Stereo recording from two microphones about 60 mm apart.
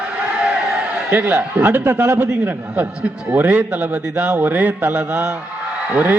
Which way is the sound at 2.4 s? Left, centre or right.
Right.